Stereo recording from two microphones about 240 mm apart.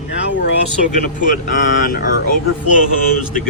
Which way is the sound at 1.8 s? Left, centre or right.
Left.